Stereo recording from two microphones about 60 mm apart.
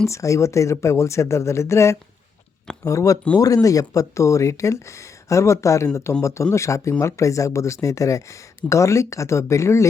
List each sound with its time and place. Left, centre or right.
0.1 s speech: left
2.8 s speech: left
3.3 s speech: left